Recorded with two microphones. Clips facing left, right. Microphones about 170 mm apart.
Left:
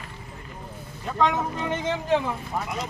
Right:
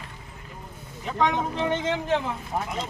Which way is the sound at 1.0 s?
20° right (ahead or behind).